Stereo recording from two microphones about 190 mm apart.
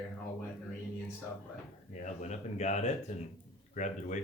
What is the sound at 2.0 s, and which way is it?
Speech, 35° left (ahead or behind).